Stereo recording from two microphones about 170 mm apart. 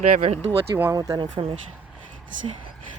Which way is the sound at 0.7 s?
15° right (ahead or behind).